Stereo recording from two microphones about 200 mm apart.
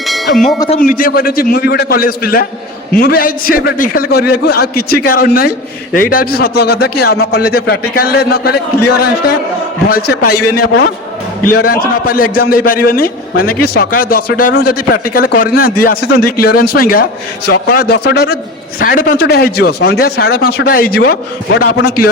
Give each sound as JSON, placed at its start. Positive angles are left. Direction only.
{"t": 0.0, "sound": "church bell", "side_deg": 0}
{"t": 0.8, "sound": "a man's voice", "side_deg": 45}
{"t": 9.9, "sound": "a man's voice", "side_deg": 50}